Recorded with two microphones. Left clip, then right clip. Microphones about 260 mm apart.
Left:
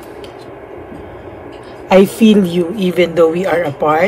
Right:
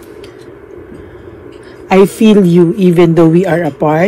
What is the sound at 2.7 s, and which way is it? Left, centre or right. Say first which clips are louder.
A woman's voice: right 4 dB; right.